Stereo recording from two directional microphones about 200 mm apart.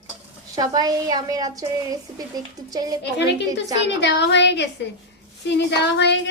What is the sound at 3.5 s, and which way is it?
A woman's voice, 60° left (ahead or behind).